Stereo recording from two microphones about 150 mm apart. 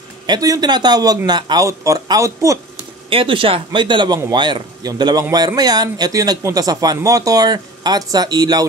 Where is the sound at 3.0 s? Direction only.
35° right (ahead or behind).